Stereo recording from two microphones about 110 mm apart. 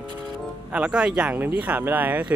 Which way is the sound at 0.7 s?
10° right (ahead or behind).